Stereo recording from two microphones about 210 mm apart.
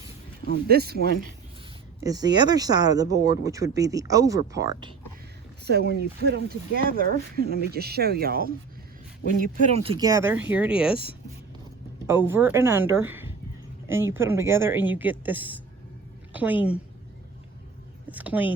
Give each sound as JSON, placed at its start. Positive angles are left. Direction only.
{"t": 0.7, "sound": "speech", "side_deg": -50}
{"t": 2.0, "sound": "speech", "side_deg": -20}
{"t": 5.6, "sound": "speech", "side_deg": -50}
{"t": 9.7, "sound": "speech", "side_deg": -25}
{"t": 12.0, "sound": "a woman's voice", "side_deg": -10}
{"t": 18.1, "sound": "speech", "side_deg": -10}